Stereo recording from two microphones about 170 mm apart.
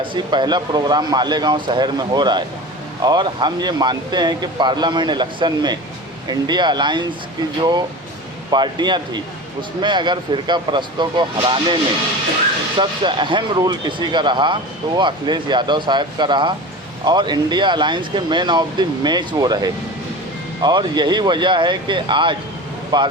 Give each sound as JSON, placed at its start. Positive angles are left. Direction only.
{"t": 0.0, "sound": "speech", "side_deg": -30}
{"t": 8.4, "sound": "speech", "side_deg": -25}